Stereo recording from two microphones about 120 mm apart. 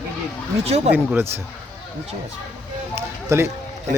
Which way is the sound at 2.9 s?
25° right (ahead or behind).